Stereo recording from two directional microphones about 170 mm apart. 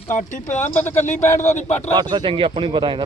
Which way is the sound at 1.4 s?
45° left (ahead or behind).